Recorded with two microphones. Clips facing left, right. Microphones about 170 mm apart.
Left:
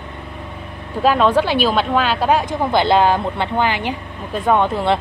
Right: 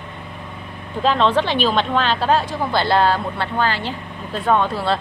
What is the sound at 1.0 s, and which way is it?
Speech, 10° left (ahead or behind).